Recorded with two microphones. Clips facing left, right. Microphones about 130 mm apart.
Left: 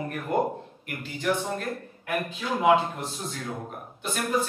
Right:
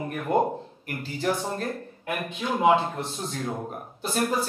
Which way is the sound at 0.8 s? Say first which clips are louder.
Right 1 dB; 35° right (ahead or behind).